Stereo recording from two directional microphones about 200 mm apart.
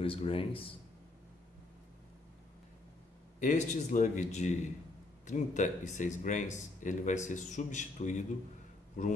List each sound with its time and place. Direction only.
0.0 s a man's voice: 30° left (ahead or behind)
3.3 s speech: 40° left (ahead or behind)